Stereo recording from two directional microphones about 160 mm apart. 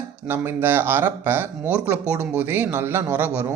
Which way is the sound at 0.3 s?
10° right (ahead or behind).